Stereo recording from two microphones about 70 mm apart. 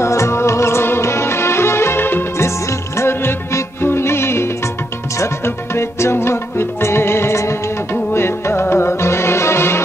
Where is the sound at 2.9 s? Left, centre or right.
Left.